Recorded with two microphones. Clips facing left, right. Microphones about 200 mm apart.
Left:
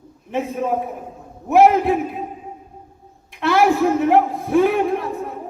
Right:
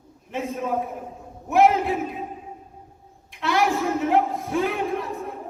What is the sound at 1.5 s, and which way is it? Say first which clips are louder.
Speech: left 5 dB; 50° left (ahead or behind).